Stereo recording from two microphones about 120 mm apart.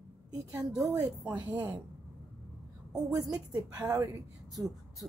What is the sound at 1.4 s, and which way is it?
Speech, 15° right (ahead or behind).